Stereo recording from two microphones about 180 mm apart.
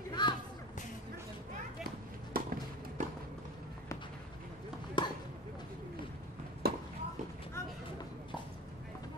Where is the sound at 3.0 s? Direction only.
40° right (ahead or behind).